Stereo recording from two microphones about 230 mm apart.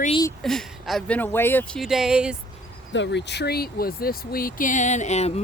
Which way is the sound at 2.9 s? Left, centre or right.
Left.